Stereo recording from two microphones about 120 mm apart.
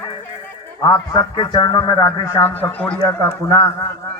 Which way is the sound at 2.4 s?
15° left (ahead or behind).